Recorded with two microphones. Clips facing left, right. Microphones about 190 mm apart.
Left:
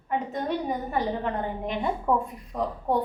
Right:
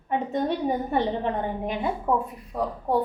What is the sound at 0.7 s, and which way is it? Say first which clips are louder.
Speech: right 3 dB; 25° right (ahead or behind).